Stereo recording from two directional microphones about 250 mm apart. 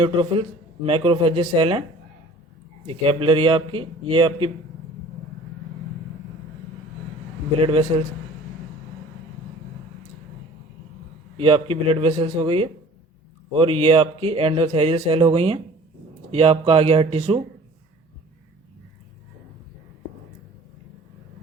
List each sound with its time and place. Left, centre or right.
0.0 s speech: right
2.8 s speech: right
7.6 s speech: right
11.3 s speech: right